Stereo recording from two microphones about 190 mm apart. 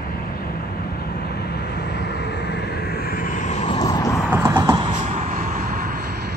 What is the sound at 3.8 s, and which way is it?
Vehicle, 20° left (ahead or behind).